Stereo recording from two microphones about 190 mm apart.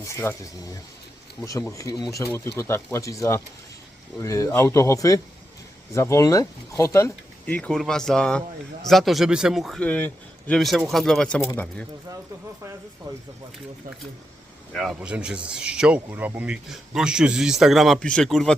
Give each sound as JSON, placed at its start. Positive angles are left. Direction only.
{"t": 0.0, "sound": "speech", "side_deg": 15}
{"t": 13.1, "sound": "speech", "side_deg": -20}
{"t": 14.7, "sound": "speech", "side_deg": 0}